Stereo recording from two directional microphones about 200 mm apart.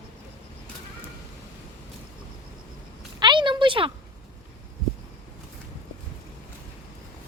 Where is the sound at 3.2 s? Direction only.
25° right (ahead or behind).